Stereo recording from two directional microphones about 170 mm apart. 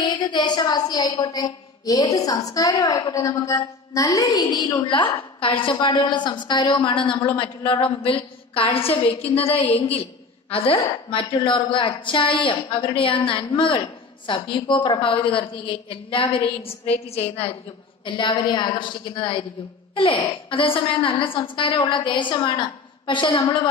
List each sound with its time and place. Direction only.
0.0 s a woman's voice: 25° left (ahead or behind)
20.4 s a woman's voice: 30° left (ahead or behind)